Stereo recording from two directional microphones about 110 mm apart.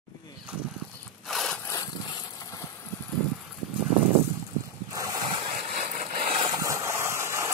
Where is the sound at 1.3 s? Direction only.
Centre (ahead or behind).